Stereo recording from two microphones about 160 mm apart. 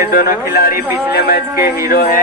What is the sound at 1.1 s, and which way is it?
Music, 70° left (ahead or behind).